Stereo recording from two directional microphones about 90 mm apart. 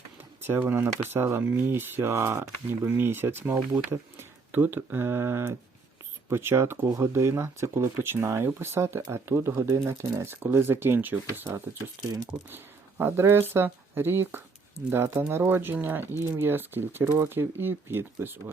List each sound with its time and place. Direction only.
0.2 s speech: 25° right (ahead or behind)
6.8 s speech: 40° right (ahead or behind); by 11.1 s 25° right (ahead or behind)
11.5 s speech: 35° right (ahead or behind)
12.5 s speech: 25° right (ahead or behind)